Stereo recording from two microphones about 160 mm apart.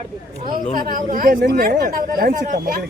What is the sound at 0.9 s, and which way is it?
Speech, 60° right (ahead or behind).